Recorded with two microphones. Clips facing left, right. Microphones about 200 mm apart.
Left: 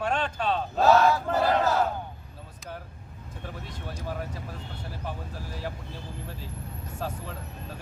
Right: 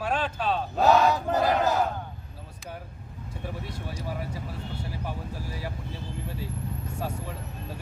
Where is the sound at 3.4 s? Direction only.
10° right (ahead or behind).